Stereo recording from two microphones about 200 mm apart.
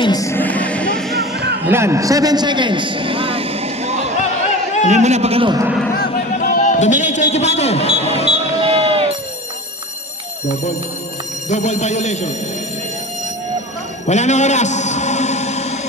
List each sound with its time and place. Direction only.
0.0 s music: 20° left (ahead or behind)
1.7 s a man's voice: 15° right (ahead or behind)
6.1 s a sound: 40° left (ahead or behind)
8.6 s a sound: 30° right (ahead or behind)
11.4 s speech: 35° left (ahead or behind)
14.0 s chant: 35° left (ahead or behind)